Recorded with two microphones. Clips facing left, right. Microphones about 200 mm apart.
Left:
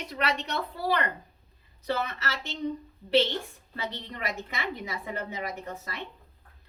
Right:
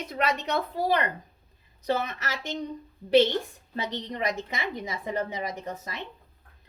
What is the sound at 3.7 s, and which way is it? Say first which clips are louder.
Speech: right 4 dB; 20° right (ahead or behind).